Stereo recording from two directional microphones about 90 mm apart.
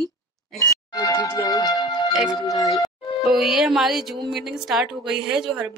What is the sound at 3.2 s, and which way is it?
A woman's voice, centre (ahead or behind).